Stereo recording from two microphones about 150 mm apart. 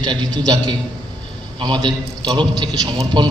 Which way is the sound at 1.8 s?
30° right (ahead or behind).